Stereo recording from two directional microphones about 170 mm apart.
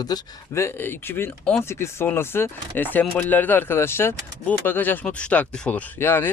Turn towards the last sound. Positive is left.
turn(degrees=10)  # may be behind; listen again after turning